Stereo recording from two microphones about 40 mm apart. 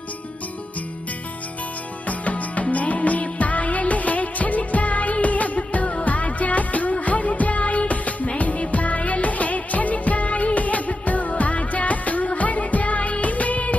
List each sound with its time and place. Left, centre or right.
2.0 s music: left